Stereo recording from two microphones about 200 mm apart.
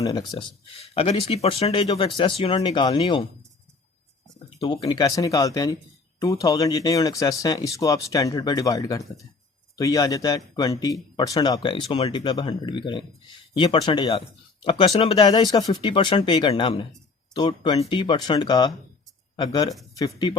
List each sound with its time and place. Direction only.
0.0 s speech: 20° left (ahead or behind)
4.4 s speech: 30° left (ahead or behind)
4.9 s speech: 20° left (ahead or behind)